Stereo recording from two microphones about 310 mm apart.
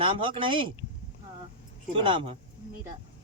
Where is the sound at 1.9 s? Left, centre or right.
Centre.